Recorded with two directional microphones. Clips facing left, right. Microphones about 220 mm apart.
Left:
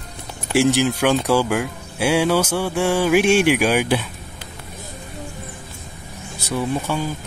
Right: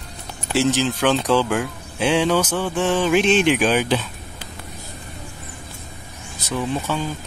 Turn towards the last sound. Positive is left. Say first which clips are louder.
# left 1 dB
turn(degrees=10)  # may be behind; listen again after turning